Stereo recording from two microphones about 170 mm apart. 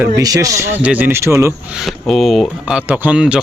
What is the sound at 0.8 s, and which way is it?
Speech, 10° right (ahead or behind).